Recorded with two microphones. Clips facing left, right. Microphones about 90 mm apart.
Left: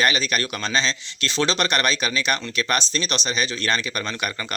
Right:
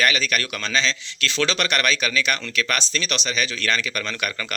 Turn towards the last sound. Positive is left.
turn(degrees=25)  # may be behind; listen again after turning